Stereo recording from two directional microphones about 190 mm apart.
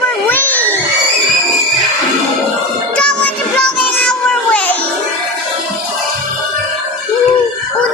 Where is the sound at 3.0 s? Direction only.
5° left (ahead or behind).